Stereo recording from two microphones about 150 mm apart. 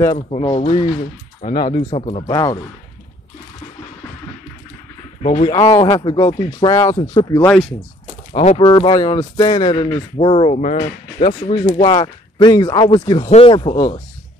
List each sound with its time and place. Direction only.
0.4 s speech: 35° left (ahead or behind)
2.3 s speech: 25° left (ahead or behind)
5.2 s speech: 45° left (ahead or behind)
5.7 s speech: 25° left (ahead or behind)
8.3 s speech: 40° left (ahead or behind)
10.5 s speech: 50° left (ahead or behind); by 13.9 s 30° left (ahead or behind)